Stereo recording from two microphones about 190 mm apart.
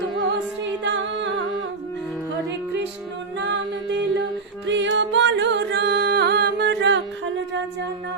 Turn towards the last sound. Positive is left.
turn(degrees=-65)  # may be behind; listen again after turning